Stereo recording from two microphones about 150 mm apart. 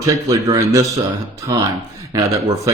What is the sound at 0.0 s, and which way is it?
Speech, 20° right (ahead or behind).